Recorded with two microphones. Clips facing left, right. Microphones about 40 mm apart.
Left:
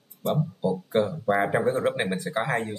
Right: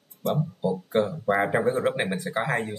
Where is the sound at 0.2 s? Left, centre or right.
Left.